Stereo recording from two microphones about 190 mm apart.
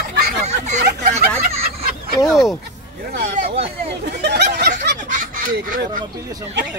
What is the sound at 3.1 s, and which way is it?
Speech, 55° right (ahead or behind).